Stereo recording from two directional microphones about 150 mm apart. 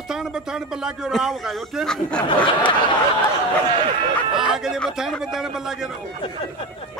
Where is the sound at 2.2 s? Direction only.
35° left (ahead or behind).